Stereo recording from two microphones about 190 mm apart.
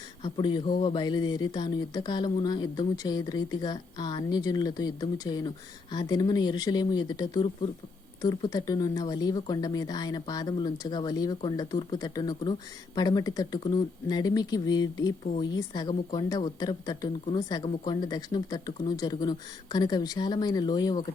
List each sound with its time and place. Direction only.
0.2 s speech: 25° left (ahead or behind)